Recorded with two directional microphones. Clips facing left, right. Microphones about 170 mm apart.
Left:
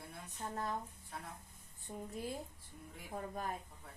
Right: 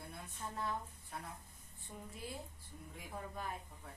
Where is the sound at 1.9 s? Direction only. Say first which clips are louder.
Left 5 dB; 30° left (ahead or behind).